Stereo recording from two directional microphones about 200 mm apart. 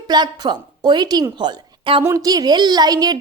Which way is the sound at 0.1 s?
20° right (ahead or behind).